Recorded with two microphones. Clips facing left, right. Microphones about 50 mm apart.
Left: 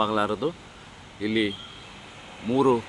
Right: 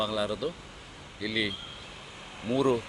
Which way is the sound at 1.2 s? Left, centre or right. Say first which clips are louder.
Left 6 dB; left.